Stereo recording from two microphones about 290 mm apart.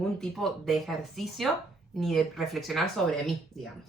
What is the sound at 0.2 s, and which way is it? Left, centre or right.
A woman's voice, centre.